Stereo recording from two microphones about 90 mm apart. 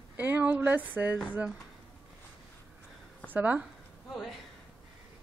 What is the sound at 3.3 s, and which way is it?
Speech, 20° right (ahead or behind).